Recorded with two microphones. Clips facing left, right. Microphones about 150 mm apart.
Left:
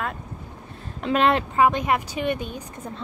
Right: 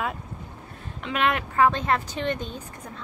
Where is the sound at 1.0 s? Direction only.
35° left (ahead or behind).